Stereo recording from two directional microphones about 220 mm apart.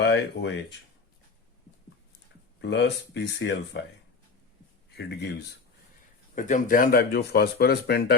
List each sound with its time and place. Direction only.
0.0 s speech: 50° left (ahead or behind)
2.6 s speech: 50° left (ahead or behind)
4.9 s speech: 50° left (ahead or behind)
6.3 s speech: 35° left (ahead or behind)